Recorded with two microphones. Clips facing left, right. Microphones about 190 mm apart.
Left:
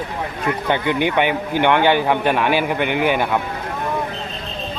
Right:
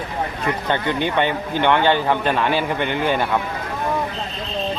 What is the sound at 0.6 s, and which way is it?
A man's voice, 15° left (ahead or behind).